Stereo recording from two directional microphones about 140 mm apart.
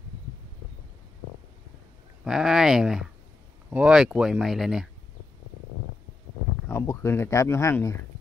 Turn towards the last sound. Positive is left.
turn(degrees=20)  # may be behind; listen again after turning